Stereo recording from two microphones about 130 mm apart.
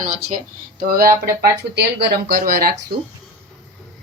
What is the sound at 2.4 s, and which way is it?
Speech, 90° right.